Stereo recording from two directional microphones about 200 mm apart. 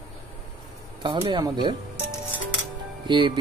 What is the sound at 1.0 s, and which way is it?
Music, 25° right (ahead or behind).